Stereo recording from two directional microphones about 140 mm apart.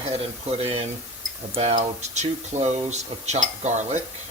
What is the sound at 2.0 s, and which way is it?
Speech, 55° right (ahead or behind).